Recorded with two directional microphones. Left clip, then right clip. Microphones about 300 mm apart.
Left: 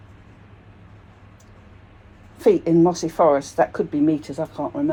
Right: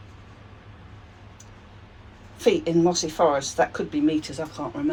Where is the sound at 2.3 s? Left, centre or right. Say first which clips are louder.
Left 4 dB; centre.